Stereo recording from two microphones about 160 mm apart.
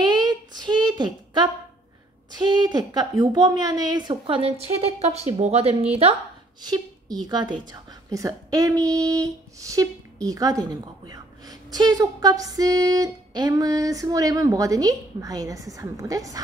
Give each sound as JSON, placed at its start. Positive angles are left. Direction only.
{"t": 0.0, "sound": "a sound", "side_deg": -25}
{"t": 2.5, "sound": "a woman's voice", "side_deg": -25}
{"t": 6.6, "sound": "a woman's voice", "side_deg": -25}